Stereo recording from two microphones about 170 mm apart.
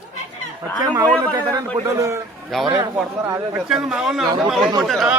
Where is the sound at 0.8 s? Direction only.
25° right (ahead or behind).